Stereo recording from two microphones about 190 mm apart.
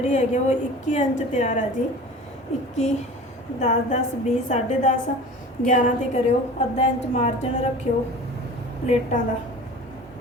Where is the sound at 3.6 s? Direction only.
40° left (ahead or behind).